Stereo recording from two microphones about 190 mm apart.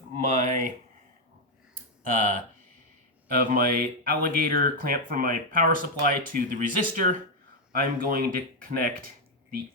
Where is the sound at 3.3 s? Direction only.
45° right (ahead or behind).